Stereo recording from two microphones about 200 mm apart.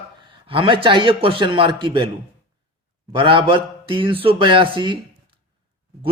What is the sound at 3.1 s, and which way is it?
Speech, 25° right (ahead or behind).